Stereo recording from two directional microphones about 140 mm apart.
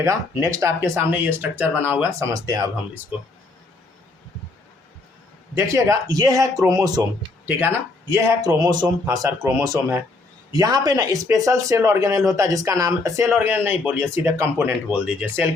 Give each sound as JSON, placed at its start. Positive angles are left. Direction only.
{"t": 0.0, "sound": "speech", "side_deg": -20}
{"t": 5.5, "sound": "speech", "side_deg": -20}